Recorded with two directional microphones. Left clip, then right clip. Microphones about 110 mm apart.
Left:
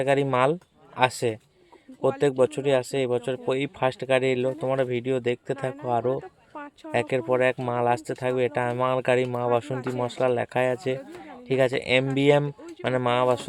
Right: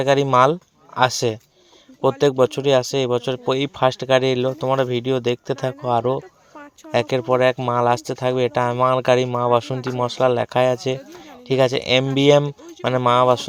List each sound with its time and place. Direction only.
0.0 s speech: 35° right (ahead or behind)